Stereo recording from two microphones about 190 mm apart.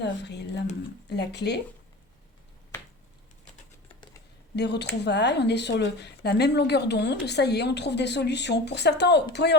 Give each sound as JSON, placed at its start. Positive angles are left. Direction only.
{"t": 0.0, "sound": "speech", "side_deg": 65}
{"t": 4.5, "sound": "speech", "side_deg": 60}